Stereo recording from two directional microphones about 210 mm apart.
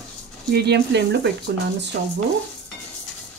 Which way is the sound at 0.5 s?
55° right (ahead or behind).